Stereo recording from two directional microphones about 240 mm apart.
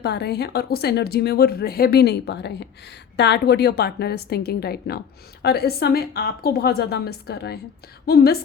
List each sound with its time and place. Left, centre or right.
0.0 s speech: left